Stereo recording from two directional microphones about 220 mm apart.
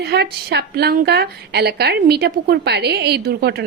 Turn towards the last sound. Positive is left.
turn(degrees=-45)  # may be behind; listen again after turning